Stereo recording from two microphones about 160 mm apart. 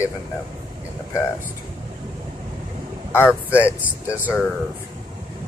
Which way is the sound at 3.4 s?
10° right (ahead or behind).